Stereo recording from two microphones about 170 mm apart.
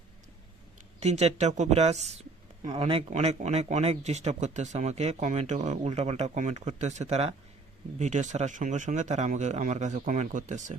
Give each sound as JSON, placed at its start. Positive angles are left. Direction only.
{"t": 1.0, "sound": "speech", "side_deg": -40}